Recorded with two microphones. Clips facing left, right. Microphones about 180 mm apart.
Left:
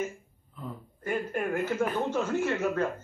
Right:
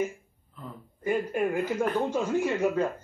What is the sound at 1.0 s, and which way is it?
A man's voice, 10° right (ahead or behind).